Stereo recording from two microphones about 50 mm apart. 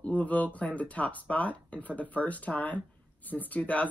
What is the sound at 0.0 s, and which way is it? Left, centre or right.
Speech, left.